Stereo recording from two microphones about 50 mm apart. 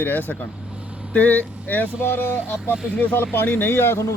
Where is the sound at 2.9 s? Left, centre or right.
Left.